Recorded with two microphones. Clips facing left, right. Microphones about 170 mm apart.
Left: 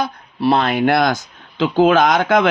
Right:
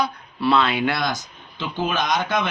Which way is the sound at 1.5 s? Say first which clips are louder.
Left 12 dB; 90° left.